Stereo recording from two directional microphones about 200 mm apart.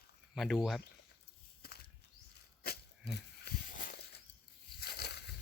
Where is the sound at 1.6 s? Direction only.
50° left (ahead or behind).